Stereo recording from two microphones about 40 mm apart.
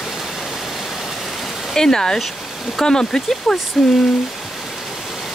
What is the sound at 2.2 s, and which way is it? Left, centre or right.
Speech, centre.